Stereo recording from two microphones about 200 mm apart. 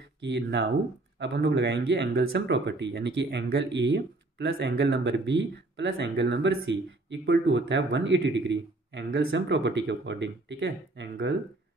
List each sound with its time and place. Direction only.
0.2 s speech: 60° right (ahead or behind)